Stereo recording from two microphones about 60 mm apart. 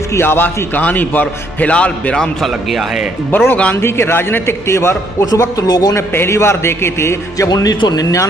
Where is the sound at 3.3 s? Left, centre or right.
Left.